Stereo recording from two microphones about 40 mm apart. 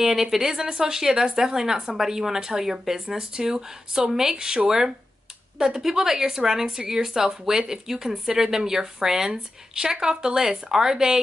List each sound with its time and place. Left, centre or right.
0.0 s speech: centre